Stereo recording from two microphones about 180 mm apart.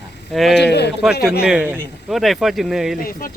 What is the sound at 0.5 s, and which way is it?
Speech, 70° left (ahead or behind).